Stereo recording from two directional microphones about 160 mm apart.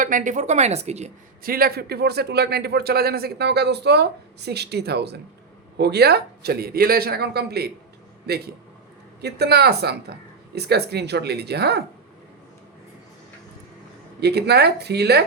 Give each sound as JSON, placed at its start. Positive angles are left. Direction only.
{"t": 0.0, "sound": "a woman's voice", "side_deg": -55}
{"t": 1.5, "sound": "a man's voice", "side_deg": -70}
{"t": 9.2, "sound": "a man's voice", "side_deg": -90}
{"t": 14.2, "sound": "a man's voice", "side_deg": -90}